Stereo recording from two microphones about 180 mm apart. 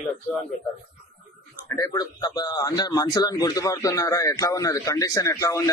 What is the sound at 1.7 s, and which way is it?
Speech, 20° left (ahead or behind).